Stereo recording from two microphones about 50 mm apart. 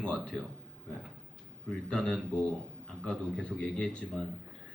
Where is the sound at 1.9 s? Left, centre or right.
Centre.